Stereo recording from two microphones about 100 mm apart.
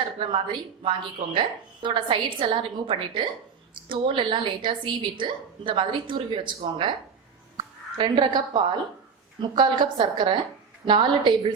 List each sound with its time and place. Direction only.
0.2 s a woman's voice: 55° right (ahead or behind)